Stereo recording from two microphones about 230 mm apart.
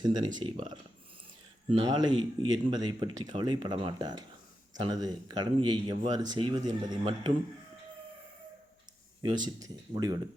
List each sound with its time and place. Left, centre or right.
0.0 s speech: centre
9.2 s speech: centre